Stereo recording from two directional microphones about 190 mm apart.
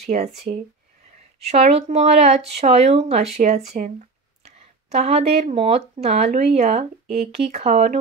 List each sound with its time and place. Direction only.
0.0 s speech: 35° right (ahead or behind)